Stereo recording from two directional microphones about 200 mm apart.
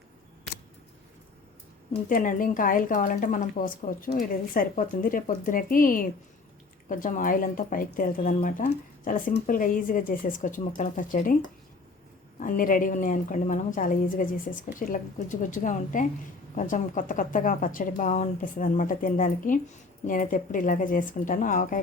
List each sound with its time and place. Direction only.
2.0 s a woman's voice: 45° left (ahead or behind)
12.4 s a woman's voice: 45° left (ahead or behind)